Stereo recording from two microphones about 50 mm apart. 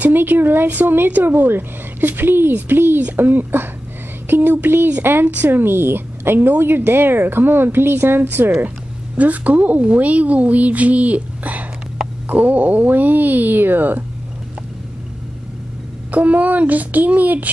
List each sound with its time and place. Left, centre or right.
0.0 s a woman's voice: right
5.2 s a woman's voice: right
8.6 s a woman's voice: right
16.1 s a woman's voice: right